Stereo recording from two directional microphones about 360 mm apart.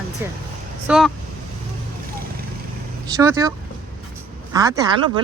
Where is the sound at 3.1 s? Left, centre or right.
Centre.